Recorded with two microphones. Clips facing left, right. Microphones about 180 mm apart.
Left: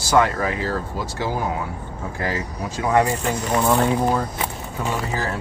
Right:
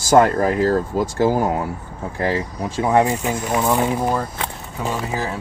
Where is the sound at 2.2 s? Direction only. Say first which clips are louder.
Right 5 dB; 30° right (ahead or behind).